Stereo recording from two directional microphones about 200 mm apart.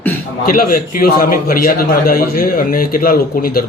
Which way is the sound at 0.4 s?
45° left (ahead or behind).